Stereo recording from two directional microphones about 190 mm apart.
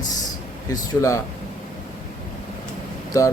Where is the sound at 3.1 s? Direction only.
15° left (ahead or behind).